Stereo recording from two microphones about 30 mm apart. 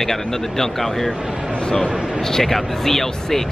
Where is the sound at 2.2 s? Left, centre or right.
Centre.